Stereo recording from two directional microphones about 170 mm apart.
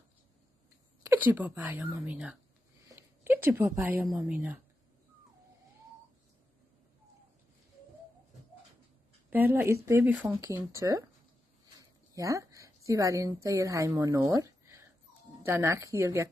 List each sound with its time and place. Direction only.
1.0 s a woman's voice: 10° right (ahead or behind)
2.9 s a sound: 15° right (ahead or behind)
4.0 s speech: 15° right (ahead or behind)
9.3 s a woman's voice: 10° right (ahead or behind)